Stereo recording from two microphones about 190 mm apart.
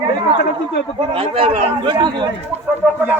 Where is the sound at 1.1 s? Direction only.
30° right (ahead or behind).